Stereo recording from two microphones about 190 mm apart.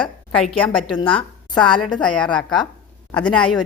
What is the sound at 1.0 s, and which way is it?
Speech, 25° left (ahead or behind).